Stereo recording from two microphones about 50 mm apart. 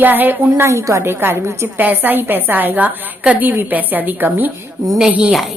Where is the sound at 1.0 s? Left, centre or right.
Right.